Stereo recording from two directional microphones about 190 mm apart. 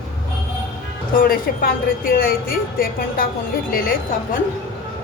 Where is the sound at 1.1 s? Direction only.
50° left (ahead or behind).